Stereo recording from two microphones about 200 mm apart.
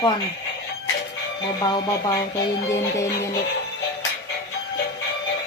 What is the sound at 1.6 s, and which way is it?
Speech, 20° left (ahead or behind).